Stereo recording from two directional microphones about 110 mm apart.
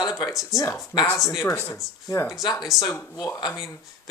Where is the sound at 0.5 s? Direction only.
30° left (ahead or behind).